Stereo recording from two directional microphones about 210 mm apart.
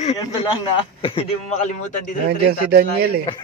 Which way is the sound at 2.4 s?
50° right (ahead or behind).